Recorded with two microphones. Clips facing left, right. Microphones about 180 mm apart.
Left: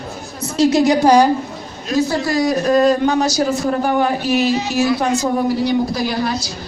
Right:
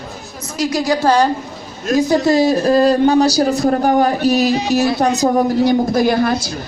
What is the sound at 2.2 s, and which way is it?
Speech, 25° right (ahead or behind).